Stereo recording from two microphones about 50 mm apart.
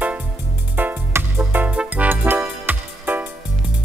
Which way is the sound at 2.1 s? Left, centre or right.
Right.